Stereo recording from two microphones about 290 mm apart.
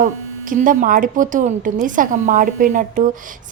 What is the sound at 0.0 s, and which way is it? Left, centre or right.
Speech, right.